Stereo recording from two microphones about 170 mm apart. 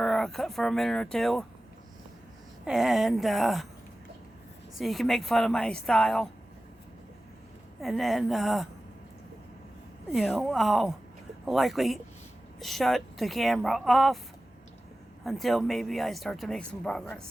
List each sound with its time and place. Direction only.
0.0 s speech: centre (ahead or behind)
2.6 s speech: centre (ahead or behind)
4.8 s speech: centre (ahead or behind)
7.8 s speech: centre (ahead or behind)
10.1 s speech: centre (ahead or behind)
15.2 s speech: centre (ahead or behind)